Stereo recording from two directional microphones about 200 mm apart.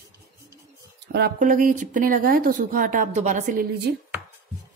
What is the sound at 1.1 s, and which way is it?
Speech, 50° right (ahead or behind).